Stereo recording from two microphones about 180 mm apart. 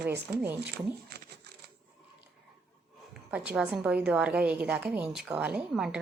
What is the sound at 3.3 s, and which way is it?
A woman's voice, 5° right (ahead or behind).